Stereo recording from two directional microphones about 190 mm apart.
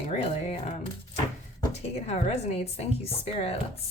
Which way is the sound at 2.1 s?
35° left (ahead or behind).